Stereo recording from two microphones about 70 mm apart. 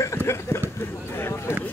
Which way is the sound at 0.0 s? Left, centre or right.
Left.